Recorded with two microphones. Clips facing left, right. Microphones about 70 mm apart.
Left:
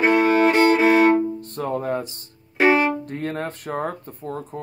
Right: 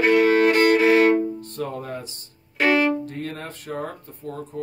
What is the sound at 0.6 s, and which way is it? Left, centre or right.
Music, left.